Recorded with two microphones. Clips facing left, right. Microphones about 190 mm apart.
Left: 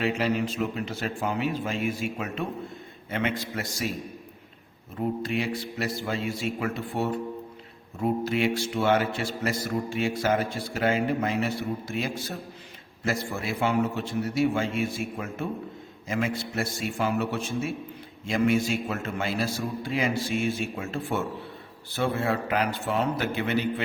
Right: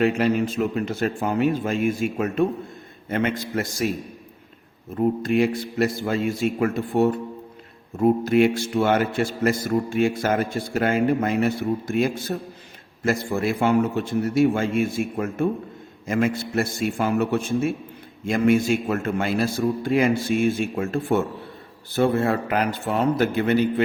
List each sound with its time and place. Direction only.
0.0 s a man's voice: 50° right (ahead or behind)
5.2 s a man's voice: 50° right (ahead or behind)